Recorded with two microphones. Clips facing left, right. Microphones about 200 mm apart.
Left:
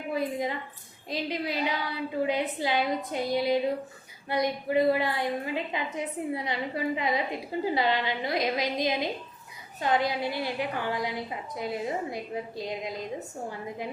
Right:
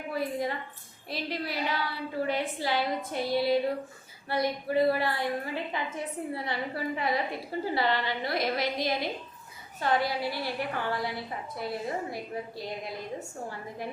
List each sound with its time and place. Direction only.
0.1 s a woman's voice: 20° left (ahead or behind)